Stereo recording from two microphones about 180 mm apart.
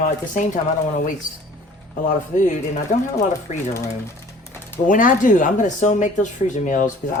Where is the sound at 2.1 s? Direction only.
45° left (ahead or behind).